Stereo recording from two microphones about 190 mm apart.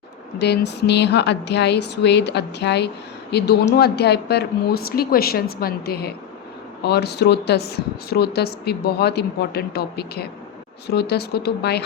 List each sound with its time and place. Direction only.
0.3 s speech: 60° left (ahead or behind)